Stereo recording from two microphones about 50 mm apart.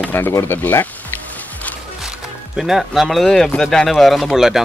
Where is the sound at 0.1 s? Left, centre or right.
Left.